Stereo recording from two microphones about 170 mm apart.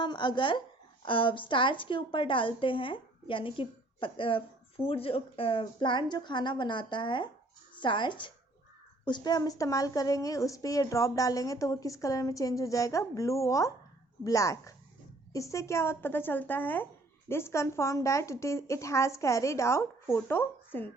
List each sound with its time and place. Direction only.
0.0 s a woman's voice: 25° left (ahead or behind); by 20.9 s 10° left (ahead or behind)